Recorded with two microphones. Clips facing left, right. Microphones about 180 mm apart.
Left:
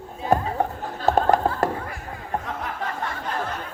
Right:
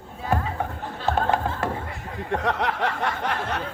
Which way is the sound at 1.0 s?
40° left (ahead or behind).